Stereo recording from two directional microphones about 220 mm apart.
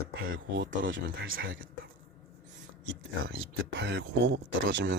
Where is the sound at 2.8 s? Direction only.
65° right (ahead or behind).